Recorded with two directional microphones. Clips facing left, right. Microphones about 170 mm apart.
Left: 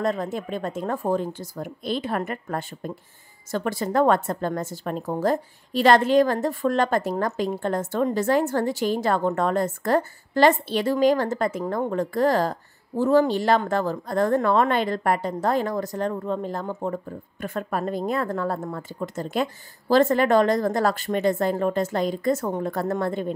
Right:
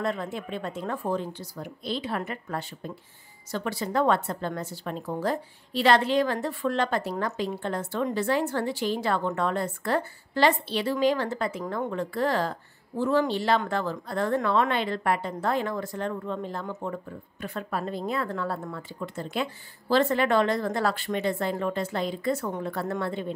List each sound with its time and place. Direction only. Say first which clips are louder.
0.0 s a woman's voice: left 4 dB; 40° left (ahead or behind)